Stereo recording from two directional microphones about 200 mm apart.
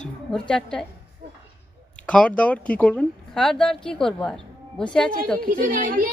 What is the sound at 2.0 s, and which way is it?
Speech, 5° left (ahead or behind).